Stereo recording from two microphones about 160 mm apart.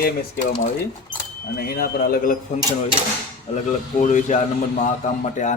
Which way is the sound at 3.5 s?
40° left (ahead or behind).